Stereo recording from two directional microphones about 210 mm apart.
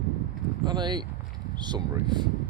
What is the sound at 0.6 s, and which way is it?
Speech, 20° right (ahead or behind).